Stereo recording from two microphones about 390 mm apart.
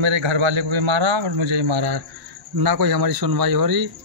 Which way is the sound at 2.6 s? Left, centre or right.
Right.